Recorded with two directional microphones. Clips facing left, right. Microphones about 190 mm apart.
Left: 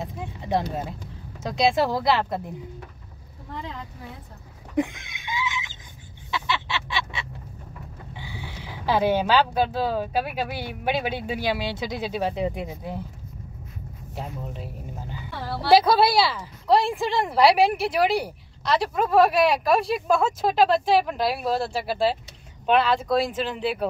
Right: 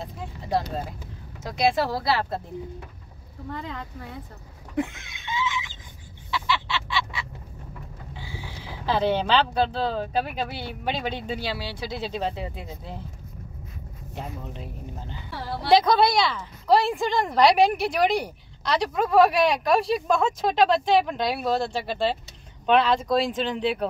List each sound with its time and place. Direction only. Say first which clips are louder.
1.4 s speech: left 2 dB; 20° left (ahead or behind)
3.5 s a woman's voice: even; centre (ahead or behind)
4.7 s a sound: left 3 dB; 15° left (ahead or behind)
8.8 s speech: left 2 dB; 10° left (ahead or behind)
14.1 s a woman's voice: left 1 dB; 5° left (ahead or behind)